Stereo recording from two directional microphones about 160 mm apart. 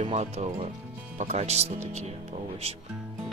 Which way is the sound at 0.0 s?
45° right (ahead or behind).